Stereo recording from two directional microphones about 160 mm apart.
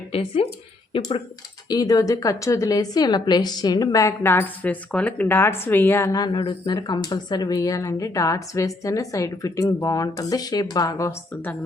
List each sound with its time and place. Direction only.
0.1 s speech: 35° left (ahead or behind)
1.7 s a woman's voice: 25° left (ahead or behind)